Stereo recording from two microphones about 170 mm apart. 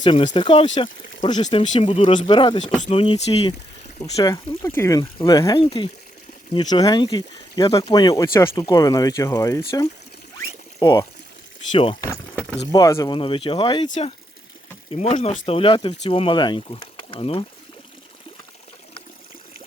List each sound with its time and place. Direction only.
0.0 s speech: 30° left (ahead or behind)
1.6 s speech: 40° left (ahead or behind)
4.2 s speech: 20° left (ahead or behind)
10.8 s speech: 20° left (ahead or behind)
11.9 s a sound: 15° left (ahead or behind)
12.7 s speech: 20° left (ahead or behind)